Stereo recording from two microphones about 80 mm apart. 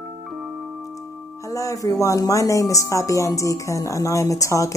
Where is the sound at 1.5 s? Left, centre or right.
Left.